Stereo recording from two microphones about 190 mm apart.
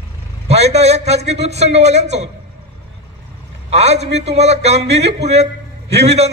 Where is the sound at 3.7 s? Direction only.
35° right (ahead or behind).